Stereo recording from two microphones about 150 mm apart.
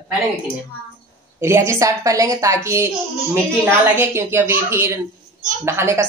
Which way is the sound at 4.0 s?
15° right (ahead or behind).